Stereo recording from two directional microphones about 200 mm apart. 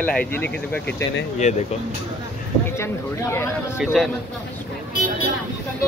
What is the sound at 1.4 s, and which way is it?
Speech, 35° left (ahead or behind).